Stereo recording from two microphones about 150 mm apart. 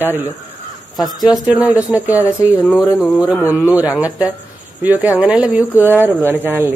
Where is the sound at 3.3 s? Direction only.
10° right (ahead or behind).